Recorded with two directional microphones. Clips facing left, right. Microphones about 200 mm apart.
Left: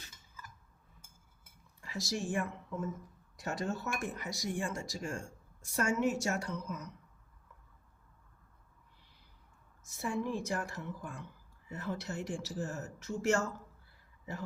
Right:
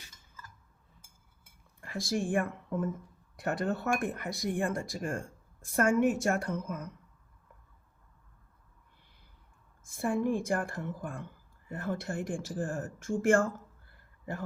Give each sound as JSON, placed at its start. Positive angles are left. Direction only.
{"t": 1.8, "sound": "speech", "side_deg": -55}
{"t": 9.8, "sound": "a woman's voice", "side_deg": -55}